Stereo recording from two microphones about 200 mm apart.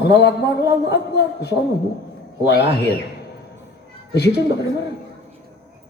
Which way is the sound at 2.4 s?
55° left (ahead or behind).